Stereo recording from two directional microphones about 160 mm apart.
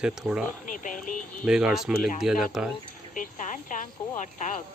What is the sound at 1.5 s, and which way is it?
Speech, 5° right (ahead or behind).